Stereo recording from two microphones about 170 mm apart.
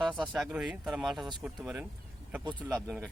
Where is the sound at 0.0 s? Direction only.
Centre (ahead or behind).